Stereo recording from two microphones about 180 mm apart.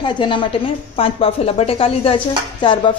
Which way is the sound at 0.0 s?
25° left (ahead or behind).